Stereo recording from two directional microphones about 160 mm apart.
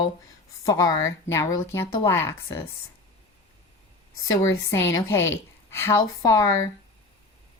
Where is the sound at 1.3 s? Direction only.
15° left (ahead or behind).